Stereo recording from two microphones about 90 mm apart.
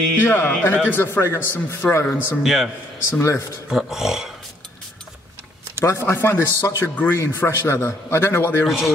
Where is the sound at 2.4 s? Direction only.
Centre (ahead or behind).